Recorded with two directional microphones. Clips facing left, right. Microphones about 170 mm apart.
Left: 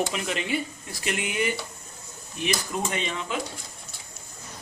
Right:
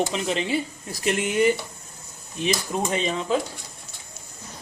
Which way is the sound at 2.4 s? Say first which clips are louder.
Right 3 dB; 25° right (ahead or behind).